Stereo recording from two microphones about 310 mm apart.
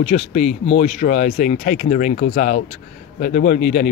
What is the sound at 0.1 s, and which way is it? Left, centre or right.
Speech, left.